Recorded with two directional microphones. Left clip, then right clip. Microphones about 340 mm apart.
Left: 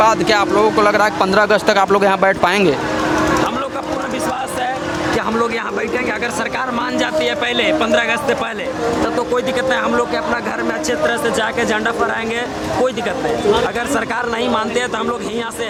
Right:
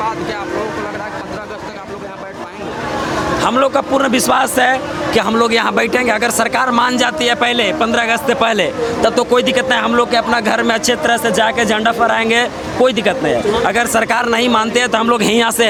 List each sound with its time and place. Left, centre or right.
4.1 s speech: right
5.4 s a man's voice: right
15.1 s a man's voice: right